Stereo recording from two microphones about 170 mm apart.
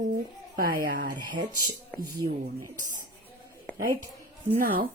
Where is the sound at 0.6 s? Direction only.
55° right (ahead or behind).